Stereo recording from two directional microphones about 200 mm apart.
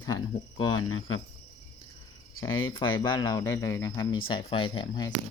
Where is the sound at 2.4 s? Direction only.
20° left (ahead or behind).